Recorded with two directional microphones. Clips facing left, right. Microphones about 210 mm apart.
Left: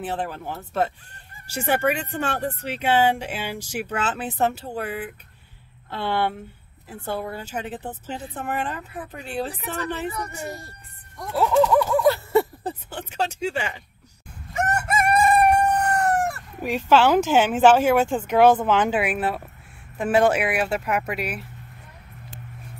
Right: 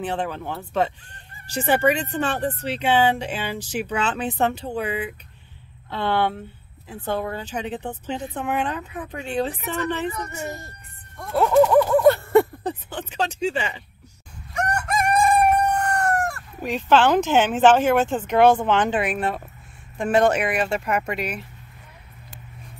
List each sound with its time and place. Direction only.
0.0 s speech: 5° left (ahead or behind)
10.2 s speech: 35° left (ahead or behind)
11.3 s speech: centre (ahead or behind)
14.5 s crowing: 5° left (ahead or behind)
20.0 s speech: 5° left (ahead or behind)